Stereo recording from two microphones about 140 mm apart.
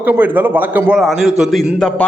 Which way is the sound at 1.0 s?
Centre (ahead or behind).